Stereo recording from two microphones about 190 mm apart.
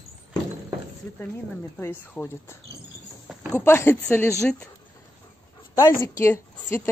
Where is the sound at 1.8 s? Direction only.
10° left (ahead or behind).